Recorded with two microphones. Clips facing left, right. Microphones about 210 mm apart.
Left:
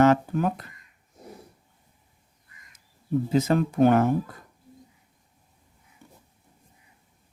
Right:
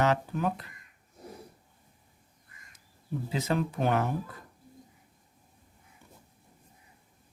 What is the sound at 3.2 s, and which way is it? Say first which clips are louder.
Speech: left 6 dB; 45° left (ahead or behind).